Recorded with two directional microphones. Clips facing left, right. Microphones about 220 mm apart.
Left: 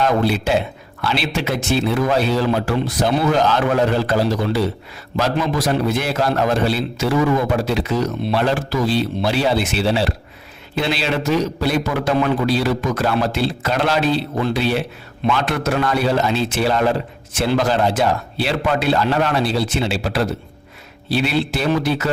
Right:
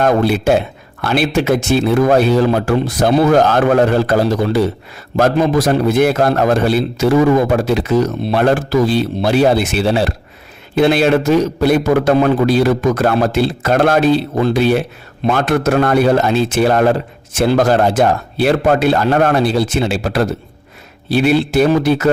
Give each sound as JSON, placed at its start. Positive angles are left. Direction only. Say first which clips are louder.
{"t": 0.0, "sound": "a man's voice", "louder": "right 5 dB", "side_deg": -50}